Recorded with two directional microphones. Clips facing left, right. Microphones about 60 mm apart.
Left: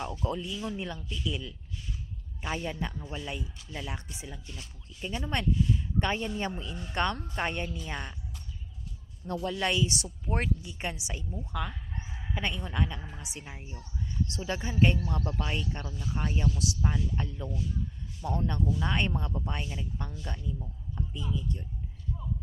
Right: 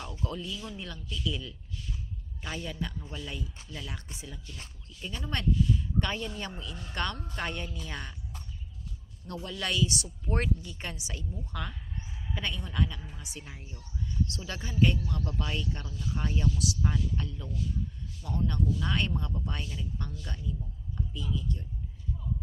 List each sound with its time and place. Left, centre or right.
0.0 s speech: left
9.2 s speech: left
10.2 s speech: centre
11.5 s speech: centre
12.3 s speech: left